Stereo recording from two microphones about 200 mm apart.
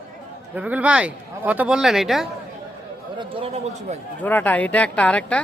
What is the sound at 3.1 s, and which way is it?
Speech, 30° right (ahead or behind).